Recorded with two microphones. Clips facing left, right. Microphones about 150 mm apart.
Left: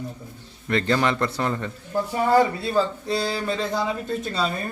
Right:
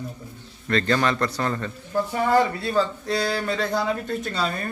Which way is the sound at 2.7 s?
5° left (ahead or behind).